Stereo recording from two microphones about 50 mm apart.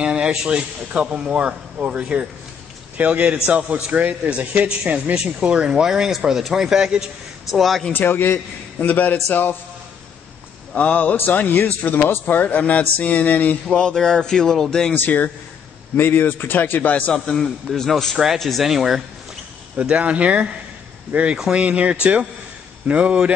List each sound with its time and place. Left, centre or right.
0.0 s speech: centre
7.5 s speech: centre
7.9 s a man's voice: left
8.7 s speech: left
10.8 s a man's voice: left
13.7 s speech: centre
15.0 s speech: left
17.1 s speech: centre
19.8 s speech: right